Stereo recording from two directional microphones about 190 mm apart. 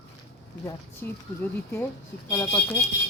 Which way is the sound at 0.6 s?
10° left (ahead or behind).